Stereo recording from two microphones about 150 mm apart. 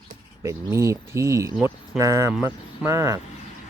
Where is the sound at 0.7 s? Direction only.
20° right (ahead or behind).